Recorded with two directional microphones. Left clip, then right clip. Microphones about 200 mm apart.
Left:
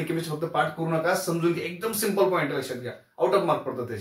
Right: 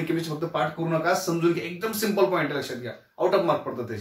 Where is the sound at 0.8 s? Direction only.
15° right (ahead or behind).